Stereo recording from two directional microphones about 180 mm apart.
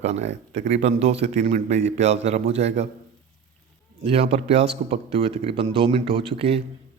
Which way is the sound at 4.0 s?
30° right (ahead or behind).